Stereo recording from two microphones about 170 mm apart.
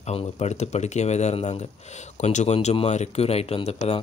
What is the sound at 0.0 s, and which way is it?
Speech, 35° left (ahead or behind).